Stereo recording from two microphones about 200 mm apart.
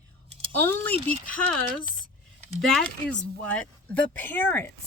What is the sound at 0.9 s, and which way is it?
Speech, 30° right (ahead or behind).